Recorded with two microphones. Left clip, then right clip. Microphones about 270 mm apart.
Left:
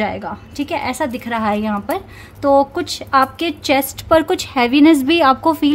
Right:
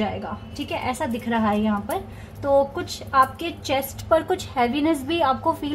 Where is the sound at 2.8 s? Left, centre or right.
Left.